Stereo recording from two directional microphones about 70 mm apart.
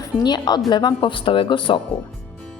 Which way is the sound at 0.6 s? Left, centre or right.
Left.